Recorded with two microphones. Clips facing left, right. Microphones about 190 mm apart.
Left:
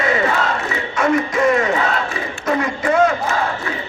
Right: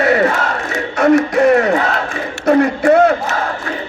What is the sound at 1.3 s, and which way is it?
Battle cry, 65° right (ahead or behind).